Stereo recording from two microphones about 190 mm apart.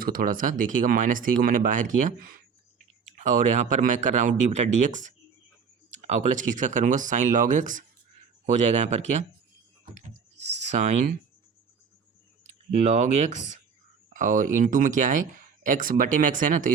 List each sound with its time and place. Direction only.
0.0 s speech: 50° right (ahead or behind)
10.3 s speech: 40° right (ahead or behind)
12.7 s speech: 35° right (ahead or behind)